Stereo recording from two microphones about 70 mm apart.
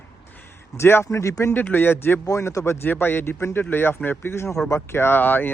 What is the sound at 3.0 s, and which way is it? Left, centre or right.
Speech, left.